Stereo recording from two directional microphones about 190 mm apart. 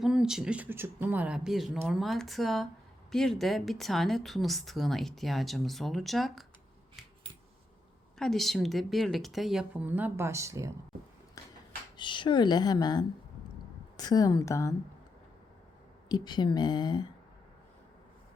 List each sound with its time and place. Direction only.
0.0 s a woman's voice: 5° right (ahead or behind)
8.2 s a woman's voice: centre (ahead or behind); by 10.7 s 15° right (ahead or behind)
11.9 s a woman's voice: 25° left (ahead or behind)
16.0 s speech: 20° left (ahead or behind)